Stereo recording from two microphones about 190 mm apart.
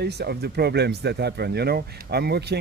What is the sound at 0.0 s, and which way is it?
Speech, 60° right (ahead or behind).